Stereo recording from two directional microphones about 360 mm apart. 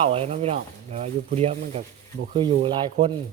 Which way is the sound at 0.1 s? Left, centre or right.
Centre.